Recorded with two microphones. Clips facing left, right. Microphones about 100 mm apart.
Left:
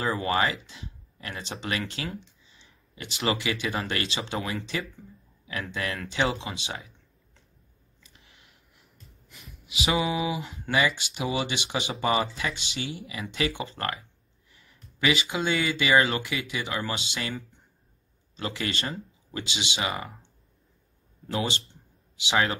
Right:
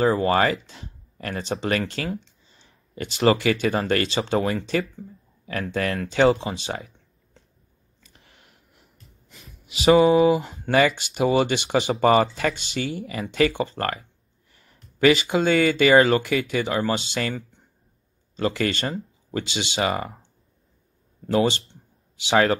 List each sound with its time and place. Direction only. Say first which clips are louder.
0.0 s speech: right 7 dB; 35° right (ahead or behind)
8.0 s a sound: right 3 dB; 45° right (ahead or behind)
9.3 s speech: even; 35° right (ahead or behind)
21.3 s speech: right 9 dB; 35° right (ahead or behind)